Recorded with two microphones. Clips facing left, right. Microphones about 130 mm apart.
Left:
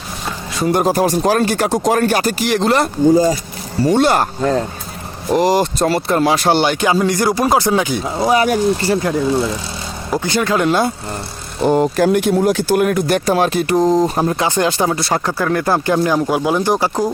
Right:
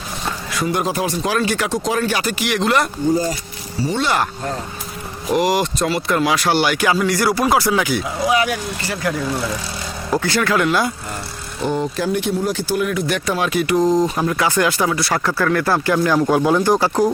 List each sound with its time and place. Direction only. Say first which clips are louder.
0.5 s speech: left 6 dB; 35° left (ahead or behind)
3.8 s speech: left 6 dB; 55° left (ahead or behind)
5.3 s speech: left 3 dB; 35° left (ahead or behind)
8.0 s speech: left 4 dB; 35° left (ahead or behind)
11.6 s speech: left 7 dB; 45° left (ahead or behind); by 17.0 s 15° left (ahead or behind)